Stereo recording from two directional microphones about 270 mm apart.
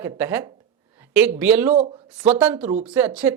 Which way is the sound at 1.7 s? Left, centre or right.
Right.